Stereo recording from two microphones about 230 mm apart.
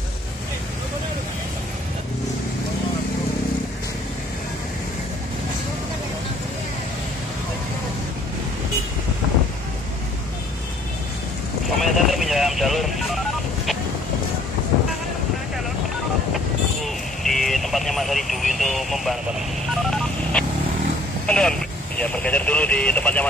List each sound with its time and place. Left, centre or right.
11.8 s vehicle: centre
16.8 s vehicle: centre
19.8 s telephone dialing: centre
21.3 s radio: centre